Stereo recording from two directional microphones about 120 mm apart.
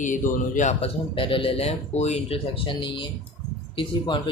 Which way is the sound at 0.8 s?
50° left (ahead or behind).